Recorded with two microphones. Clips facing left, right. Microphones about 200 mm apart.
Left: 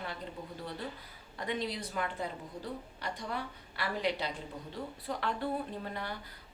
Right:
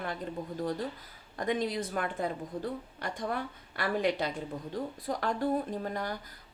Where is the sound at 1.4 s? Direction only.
45° right (ahead or behind).